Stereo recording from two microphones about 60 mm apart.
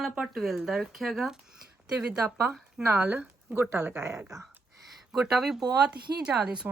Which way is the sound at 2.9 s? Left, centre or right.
Right.